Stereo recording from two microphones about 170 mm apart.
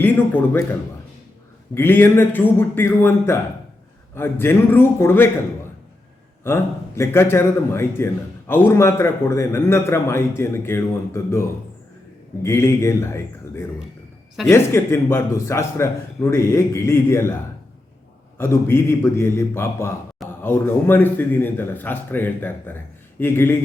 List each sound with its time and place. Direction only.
1.7 s a man's voice: 10° left (ahead or behind)
6.4 s a man's voice: 15° left (ahead or behind)
14.4 s a man's voice: 15° left (ahead or behind)
18.3 s a man's voice: 15° left (ahead or behind)